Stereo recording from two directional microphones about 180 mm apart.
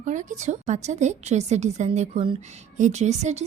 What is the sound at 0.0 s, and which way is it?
A woman's voice, 45° right (ahead or behind).